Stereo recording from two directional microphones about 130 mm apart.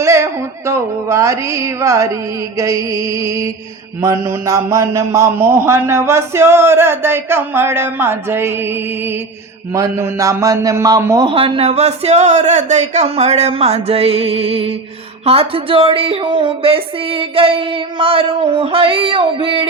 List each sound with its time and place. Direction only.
0.0 s a sound: 20° right (ahead or behind)
2.6 s a man's voice: 25° right (ahead or behind)
11.3 s speech: 45° right (ahead or behind)